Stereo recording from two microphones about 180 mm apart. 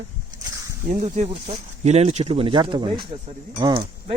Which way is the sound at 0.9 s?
40° right (ahead or behind).